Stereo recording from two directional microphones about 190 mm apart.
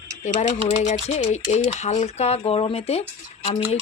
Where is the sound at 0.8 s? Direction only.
35° left (ahead or behind).